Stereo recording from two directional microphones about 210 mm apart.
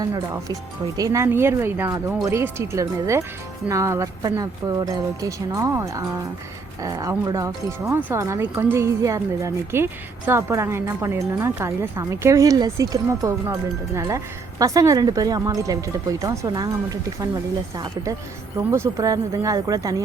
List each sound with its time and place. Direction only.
0.0 s speech: 20° right (ahead or behind)